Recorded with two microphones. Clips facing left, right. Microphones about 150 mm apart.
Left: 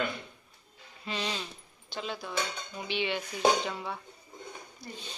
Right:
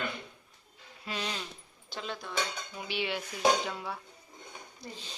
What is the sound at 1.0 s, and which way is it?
A woman's voice, centre (ahead or behind).